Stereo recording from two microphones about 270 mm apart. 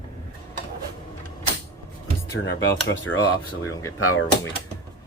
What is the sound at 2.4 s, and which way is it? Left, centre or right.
Speech, left.